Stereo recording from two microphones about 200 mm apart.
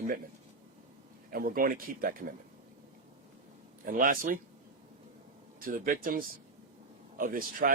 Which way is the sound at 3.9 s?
45° right (ahead or behind).